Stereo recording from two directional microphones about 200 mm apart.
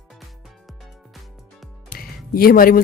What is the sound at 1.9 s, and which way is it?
Music, 45° left (ahead or behind).